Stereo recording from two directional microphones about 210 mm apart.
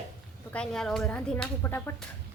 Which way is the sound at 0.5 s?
5° left (ahead or behind).